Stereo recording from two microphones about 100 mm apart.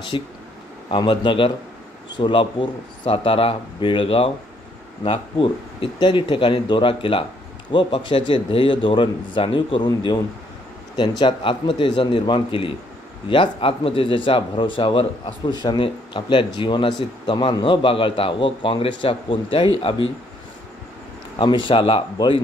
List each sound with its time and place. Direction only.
0.1 s a man's voice: 65° left (ahead or behind)
3.1 s a man's voice: 70° left (ahead or behind)
9.8 s a man's voice: 45° left (ahead or behind); by 15.5 s 60° left (ahead or behind)
15.5 s a man's voice: 45° left (ahead or behind); by 20.1 s 65° left (ahead or behind)
21.4 s a man's voice: 55° left (ahead or behind)